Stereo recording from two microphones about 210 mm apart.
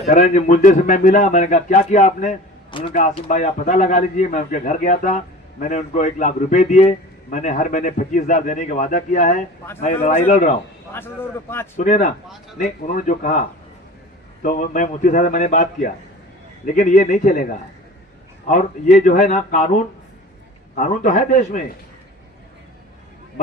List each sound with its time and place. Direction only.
0.0 s a man's voice: 35° left (ahead or behind)
10.9 s a man's voice: 10° left (ahead or behind)
11.8 s a man's voice: 35° left (ahead or behind)